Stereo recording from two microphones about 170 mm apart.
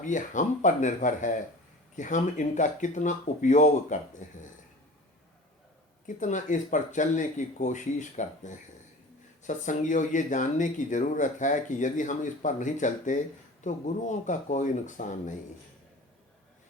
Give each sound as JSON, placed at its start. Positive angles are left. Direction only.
{"t": 0.0, "sound": "speech", "side_deg": 50}
{"t": 6.1, "sound": "speech", "side_deg": 50}